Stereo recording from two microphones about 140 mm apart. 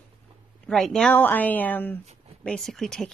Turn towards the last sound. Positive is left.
turn(degrees=5)  # may be behind; listen again after turning